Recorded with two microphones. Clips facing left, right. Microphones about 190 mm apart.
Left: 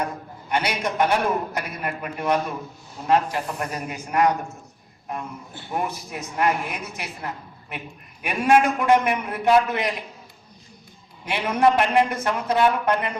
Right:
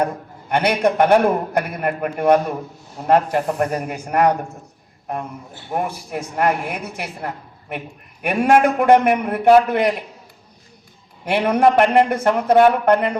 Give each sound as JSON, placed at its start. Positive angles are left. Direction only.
{"t": 0.0, "sound": "a man's voice", "side_deg": -55}
{"t": 5.7, "sound": "a man's voice", "side_deg": -50}
{"t": 11.3, "sound": "a man's voice", "side_deg": -55}